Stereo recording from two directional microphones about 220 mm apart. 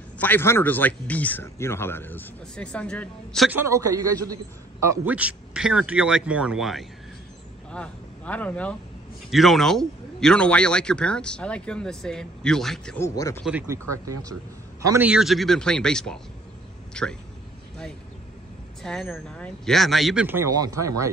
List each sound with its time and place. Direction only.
0.2 s speech: 10° left (ahead or behind)
3.5 s a man's voice: 15° right (ahead or behind); by 13.4 s 15° left (ahead or behind)
13.4 s a man's voice: 5° right (ahead or behind)
18.8 s a man's voice: centre (ahead or behind); by 21.1 s 15° right (ahead or behind)